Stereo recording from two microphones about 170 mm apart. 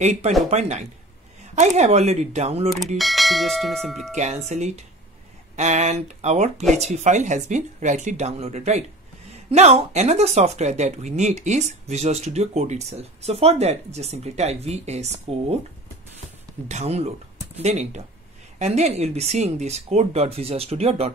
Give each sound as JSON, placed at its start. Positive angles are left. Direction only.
{"t": 0.0, "sound": "speech", "side_deg": -45}
{"t": 3.0, "sound": "bell", "side_deg": 0}
{"t": 4.1, "sound": "speech", "side_deg": -45}
{"t": 16.6, "sound": "speech", "side_deg": -40}